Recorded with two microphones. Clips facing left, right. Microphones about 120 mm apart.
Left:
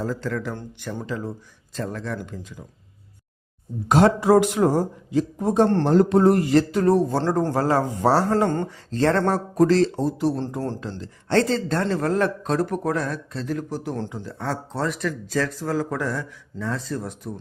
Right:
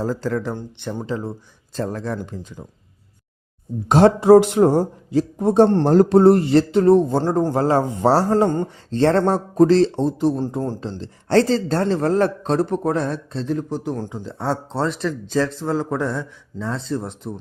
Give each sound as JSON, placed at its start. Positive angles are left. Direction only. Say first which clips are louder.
{"t": 0.0, "sound": "speech", "louder": "right 4 dB", "side_deg": -35}
{"t": 3.8, "sound": "speech", "louder": "right 5 dB", "side_deg": -25}
{"t": 8.6, "sound": "speech", "louder": "right 3 dB", "side_deg": -30}
{"t": 10.8, "sound": "speech", "louder": "right 3 dB", "side_deg": -30}